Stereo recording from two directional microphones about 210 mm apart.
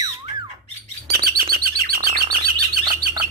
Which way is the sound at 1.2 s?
45° right (ahead or behind).